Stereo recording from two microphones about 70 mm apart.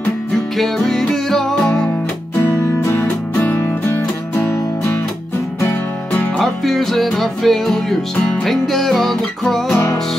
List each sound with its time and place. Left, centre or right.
0.6 s music: centre
2.3 s music: left
3.0 s music: left
6.4 s music: centre